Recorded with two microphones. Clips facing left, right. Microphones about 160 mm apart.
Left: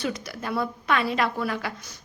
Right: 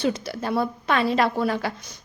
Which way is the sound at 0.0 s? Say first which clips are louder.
Right 5 dB; 25° right (ahead or behind).